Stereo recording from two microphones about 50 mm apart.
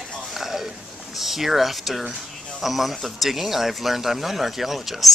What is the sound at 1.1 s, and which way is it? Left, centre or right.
A man's voice, centre.